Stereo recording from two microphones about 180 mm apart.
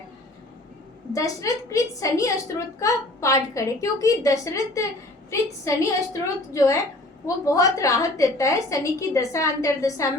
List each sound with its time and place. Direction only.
1.1 s a woman's voice: 20° left (ahead or behind)